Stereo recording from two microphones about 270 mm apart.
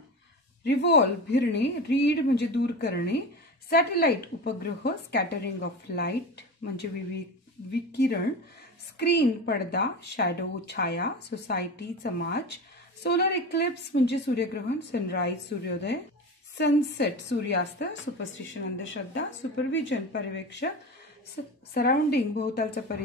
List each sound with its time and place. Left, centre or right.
0.7 s a woman's voice: left
8.9 s a woman's voice: left
21.7 s a woman's voice: left